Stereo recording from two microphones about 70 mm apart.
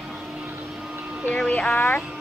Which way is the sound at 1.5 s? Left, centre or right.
Centre.